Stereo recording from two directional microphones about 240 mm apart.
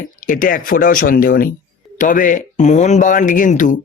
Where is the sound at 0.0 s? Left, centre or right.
Left.